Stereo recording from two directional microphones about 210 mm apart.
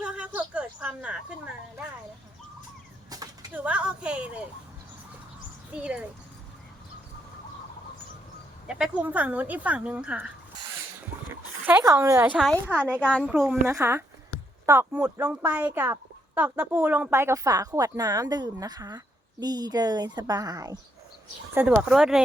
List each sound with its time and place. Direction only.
0.0 s a sound: 5° right (ahead or behind)
3.1 s a sound: 15° right (ahead or behind)
3.5 s a sound: 5° right (ahead or behind)
5.7 s speech: 5° right (ahead or behind)
8.6 s speech: 5° right (ahead or behind)
11.6 s speech: 10° right (ahead or behind)
13.0 s speech: 5° left (ahead or behind)
13.3 s speech: 10° right (ahead or behind)
21.8 s speech: 5° right (ahead or behind)